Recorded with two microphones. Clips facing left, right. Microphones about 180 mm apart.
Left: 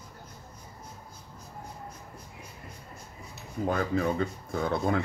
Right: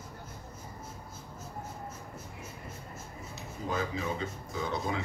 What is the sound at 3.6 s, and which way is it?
Speech, 60° left (ahead or behind).